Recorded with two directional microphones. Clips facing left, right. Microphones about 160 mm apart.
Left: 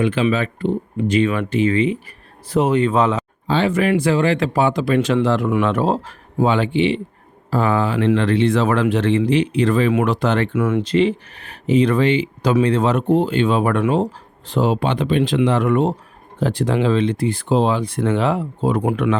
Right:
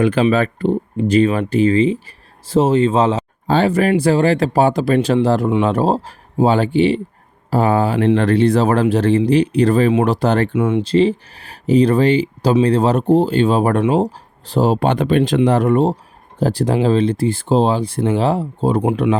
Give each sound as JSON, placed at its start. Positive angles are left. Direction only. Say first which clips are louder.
{"t": 0.0, "sound": "speech", "louder": "right 4 dB", "side_deg": -40}
{"t": 3.4, "sound": "speech", "louder": "right 3 dB", "side_deg": -40}
{"t": 10.5, "sound": "speech", "louder": "right 2 dB", "side_deg": -20}
{"t": 10.8, "sound": "speech", "louder": "right 3 dB", "side_deg": -35}